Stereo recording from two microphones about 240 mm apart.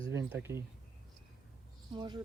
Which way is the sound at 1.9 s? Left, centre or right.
Centre.